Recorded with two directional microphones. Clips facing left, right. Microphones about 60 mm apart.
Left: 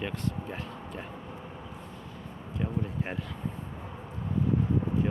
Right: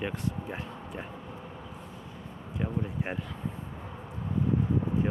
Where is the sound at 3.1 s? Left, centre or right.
Centre.